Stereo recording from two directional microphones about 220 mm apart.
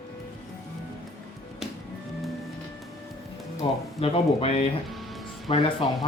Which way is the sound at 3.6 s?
25° left (ahead or behind).